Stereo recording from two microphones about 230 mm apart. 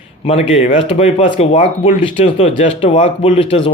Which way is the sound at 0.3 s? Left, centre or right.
Left.